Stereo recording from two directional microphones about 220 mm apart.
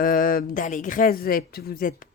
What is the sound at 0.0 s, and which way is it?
Speech, 40° left (ahead or behind).